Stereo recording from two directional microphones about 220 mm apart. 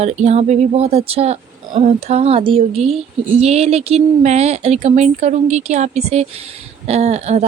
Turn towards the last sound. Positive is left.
turn(degrees=-30)  # may be behind; listen again after turning